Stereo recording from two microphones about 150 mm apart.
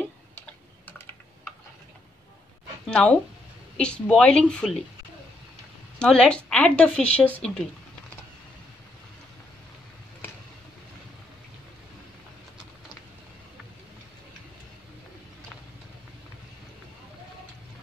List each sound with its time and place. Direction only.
0.0 s typing: 10° left (ahead or behind)
2.9 s a woman's voice: 10° left (ahead or behind)
5.9 s a woman's voice: 5° left (ahead or behind)